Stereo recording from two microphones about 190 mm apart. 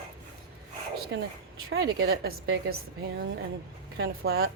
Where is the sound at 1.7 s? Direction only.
55° right (ahead or behind).